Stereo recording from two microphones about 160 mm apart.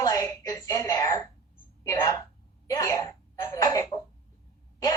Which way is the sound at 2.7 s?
20° left (ahead or behind).